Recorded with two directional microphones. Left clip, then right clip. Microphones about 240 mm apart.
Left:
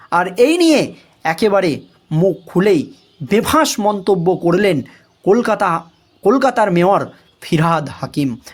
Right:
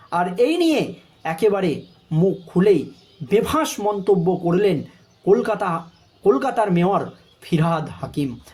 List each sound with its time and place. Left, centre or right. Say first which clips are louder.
0.1 s speech: left 6 dB; left